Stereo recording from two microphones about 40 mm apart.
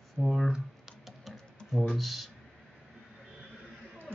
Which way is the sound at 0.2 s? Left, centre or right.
Centre.